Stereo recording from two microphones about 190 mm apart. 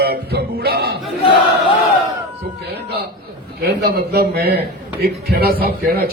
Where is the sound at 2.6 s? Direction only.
60° right (ahead or behind).